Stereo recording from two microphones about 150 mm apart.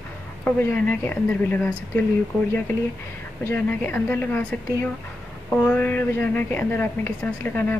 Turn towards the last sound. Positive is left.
turn(degrees=10)  # may be behind; listen again after turning